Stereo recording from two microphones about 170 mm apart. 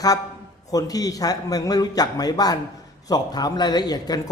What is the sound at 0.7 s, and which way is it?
Speech, 20° left (ahead or behind).